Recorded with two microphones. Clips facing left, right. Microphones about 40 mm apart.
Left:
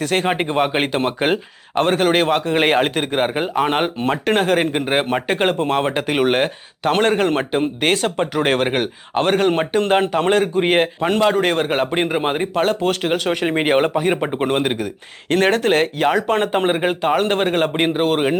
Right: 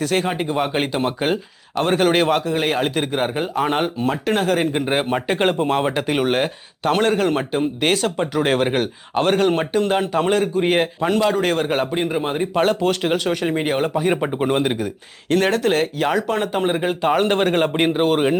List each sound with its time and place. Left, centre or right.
0.3 s speech: left
1.8 s speech: centre
2.4 s a man's voice: left
2.8 s speech: centre
6.9 s speech: left
9.9 s speech: left
12.5 s speech: centre
13.0 s speech: centre
13.3 s speech: left
15.3 s speech: left
17.0 s speech: centre